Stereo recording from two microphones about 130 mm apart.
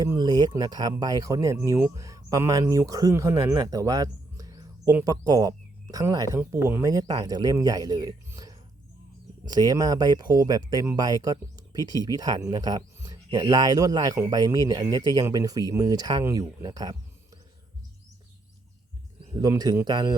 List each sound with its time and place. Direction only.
0.2 s speech: 30° right (ahead or behind)
8.4 s whispering: 30° right (ahead or behind)
9.5 s speech: 30° right (ahead or behind)
19.4 s speech: 30° right (ahead or behind)